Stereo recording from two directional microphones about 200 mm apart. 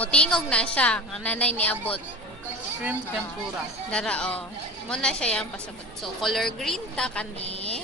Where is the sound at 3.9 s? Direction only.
5° left (ahead or behind).